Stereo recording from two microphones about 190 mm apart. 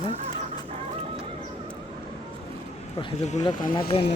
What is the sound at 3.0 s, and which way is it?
Speech, 25° left (ahead or behind).